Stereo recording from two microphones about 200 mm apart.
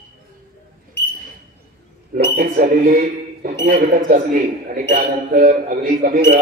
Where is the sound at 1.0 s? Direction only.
55° left (ahead or behind).